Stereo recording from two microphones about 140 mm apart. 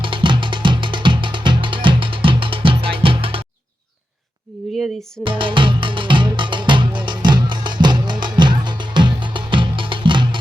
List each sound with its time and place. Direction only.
0.0 s music: 35° right (ahead or behind)
4.7 s music: centre (ahead or behind)
5.2 s music: 40° right (ahead or behind)